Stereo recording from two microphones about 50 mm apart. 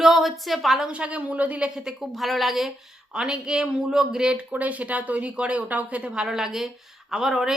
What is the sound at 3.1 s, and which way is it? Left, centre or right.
Speech, centre.